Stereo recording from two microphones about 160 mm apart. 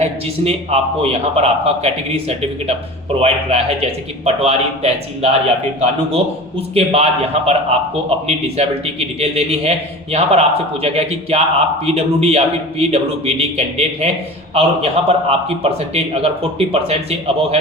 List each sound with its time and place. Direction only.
0.0 s a man's voice: 40° right (ahead or behind)